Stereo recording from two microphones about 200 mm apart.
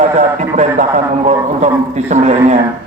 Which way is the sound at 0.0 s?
35° right (ahead or behind).